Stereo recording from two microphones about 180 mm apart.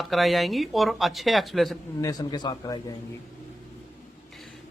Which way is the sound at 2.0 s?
20° left (ahead or behind).